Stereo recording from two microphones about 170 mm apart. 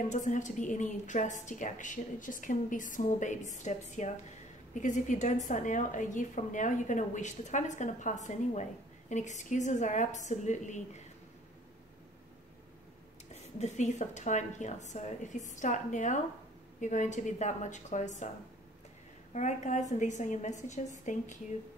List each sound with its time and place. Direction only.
0.1 s a woman's voice: 45° left (ahead or behind)
13.3 s a woman's voice: 40° left (ahead or behind)
19.3 s a woman's voice: 45° left (ahead or behind)